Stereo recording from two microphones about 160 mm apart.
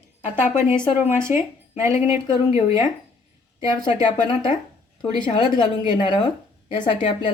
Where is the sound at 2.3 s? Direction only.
35° left (ahead or behind).